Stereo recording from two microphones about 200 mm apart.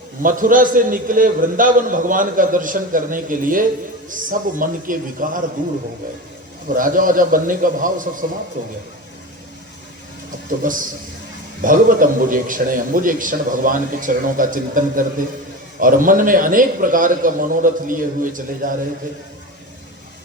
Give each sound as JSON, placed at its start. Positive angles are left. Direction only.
{"t": 0.2, "sound": "a man's voice", "side_deg": -40}
{"t": 6.7, "sound": "a man's voice", "side_deg": -40}
{"t": 10.6, "sound": "a man's voice", "side_deg": -40}